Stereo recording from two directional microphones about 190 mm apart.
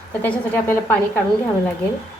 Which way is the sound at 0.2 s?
10° left (ahead or behind).